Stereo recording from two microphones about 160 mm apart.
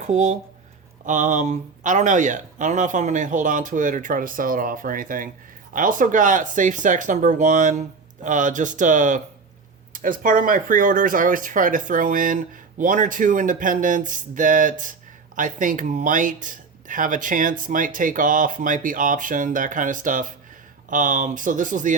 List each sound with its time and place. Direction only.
0.0 s speech: 50° right (ahead or behind)